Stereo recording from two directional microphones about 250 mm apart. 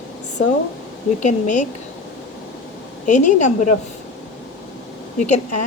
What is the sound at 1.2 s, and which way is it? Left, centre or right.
Speech, left.